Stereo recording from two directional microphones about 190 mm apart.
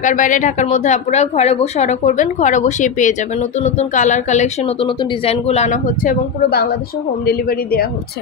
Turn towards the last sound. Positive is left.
turn(degrees=50)  # may be behind; listen again after turning